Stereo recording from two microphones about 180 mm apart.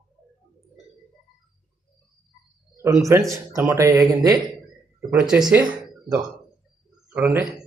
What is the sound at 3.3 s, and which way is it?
Speech, 15° right (ahead or behind).